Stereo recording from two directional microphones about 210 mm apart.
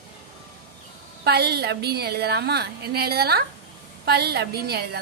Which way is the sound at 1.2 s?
50° right (ahead or behind).